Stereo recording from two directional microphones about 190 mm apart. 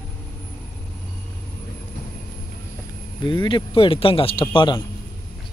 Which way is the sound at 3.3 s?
25° left (ahead or behind).